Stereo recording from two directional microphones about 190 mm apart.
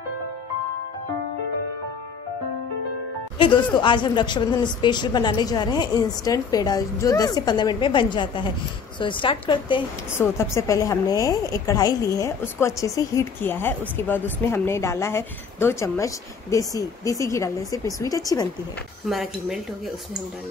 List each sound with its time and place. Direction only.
3.3 s a woman's voice: 25° left (ahead or behind)
10.1 s a woman's voice: 15° left (ahead or behind)
19.0 s speech: centre (ahead or behind)